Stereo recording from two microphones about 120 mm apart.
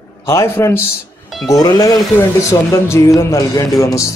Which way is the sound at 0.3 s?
25° left (ahead or behind).